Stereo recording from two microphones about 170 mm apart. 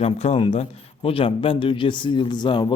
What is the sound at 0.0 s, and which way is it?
A man's voice, 35° left (ahead or behind).